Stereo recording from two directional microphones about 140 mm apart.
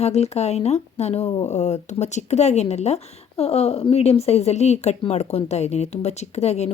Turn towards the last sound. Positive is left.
turn(degrees=50)  # may be behind; listen again after turning